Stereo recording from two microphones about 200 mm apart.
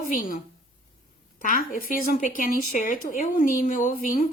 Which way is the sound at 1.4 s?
45° left (ahead or behind).